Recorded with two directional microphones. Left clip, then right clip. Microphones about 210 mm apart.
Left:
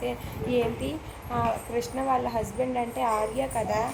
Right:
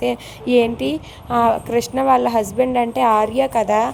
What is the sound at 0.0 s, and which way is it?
Speech, 50° right (ahead or behind).